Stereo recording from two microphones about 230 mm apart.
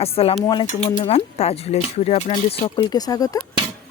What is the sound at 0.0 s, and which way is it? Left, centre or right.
Speech, left.